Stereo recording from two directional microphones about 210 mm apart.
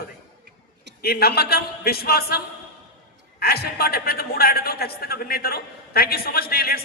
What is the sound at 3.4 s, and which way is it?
A man's voice, 50° left (ahead or behind).